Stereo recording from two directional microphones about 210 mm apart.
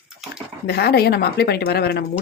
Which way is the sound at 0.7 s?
50° left (ahead or behind).